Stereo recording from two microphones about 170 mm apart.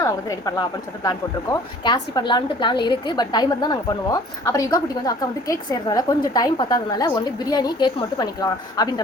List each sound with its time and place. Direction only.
0.0 s a woman's voice: 20° left (ahead or behind)